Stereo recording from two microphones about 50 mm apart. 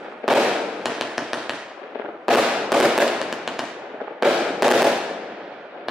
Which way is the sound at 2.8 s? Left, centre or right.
Centre.